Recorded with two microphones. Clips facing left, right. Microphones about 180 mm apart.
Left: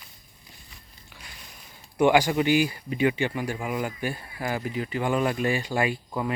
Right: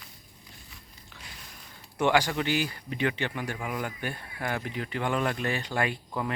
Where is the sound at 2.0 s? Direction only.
15° left (ahead or behind).